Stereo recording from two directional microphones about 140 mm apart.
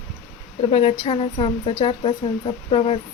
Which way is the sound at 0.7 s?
45° left (ahead or behind).